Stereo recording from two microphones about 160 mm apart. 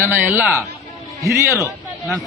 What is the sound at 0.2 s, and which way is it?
A man's voice, 10° right (ahead or behind).